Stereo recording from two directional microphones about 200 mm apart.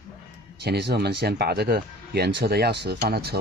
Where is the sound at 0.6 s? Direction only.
55° right (ahead or behind).